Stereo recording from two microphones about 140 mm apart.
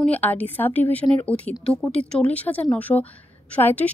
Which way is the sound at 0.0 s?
10° left (ahead or behind).